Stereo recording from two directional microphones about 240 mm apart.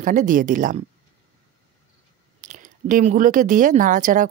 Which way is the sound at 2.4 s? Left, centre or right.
Right.